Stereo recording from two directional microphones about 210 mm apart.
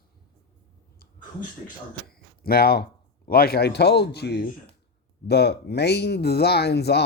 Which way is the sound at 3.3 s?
45° left (ahead or behind).